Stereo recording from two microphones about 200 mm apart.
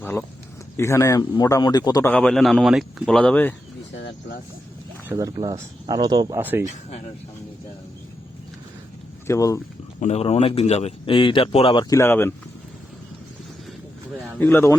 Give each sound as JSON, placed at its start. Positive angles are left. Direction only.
{"t": 0.0, "sound": "speech", "side_deg": 10}
{"t": 2.0, "sound": "speech", "side_deg": 5}
{"t": 3.9, "sound": "speech", "side_deg": 60}
{"t": 5.0, "sound": "speech", "side_deg": -15}
{"t": 6.4, "sound": "speech", "side_deg": -10}
{"t": 9.2, "sound": "speech", "side_deg": 15}
{"t": 10.0, "sound": "speech", "side_deg": 30}
{"t": 14.3, "sound": "speech", "side_deg": 10}